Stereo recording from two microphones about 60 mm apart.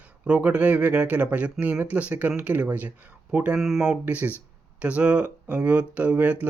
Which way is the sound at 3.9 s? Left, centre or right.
Right.